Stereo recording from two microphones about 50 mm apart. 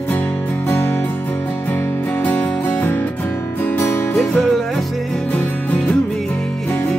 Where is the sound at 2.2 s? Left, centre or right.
Left.